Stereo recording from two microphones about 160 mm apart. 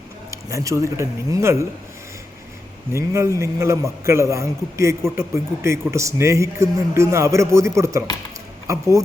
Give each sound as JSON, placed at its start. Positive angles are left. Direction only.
{"t": 0.3, "sound": "speech", "side_deg": -20}
{"t": 2.9, "sound": "a man's voice", "side_deg": -20}